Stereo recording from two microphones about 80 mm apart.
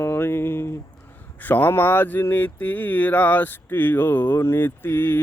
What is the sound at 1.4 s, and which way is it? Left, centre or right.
Speech, left.